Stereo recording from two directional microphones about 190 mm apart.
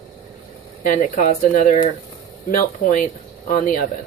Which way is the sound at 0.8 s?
40° left (ahead or behind).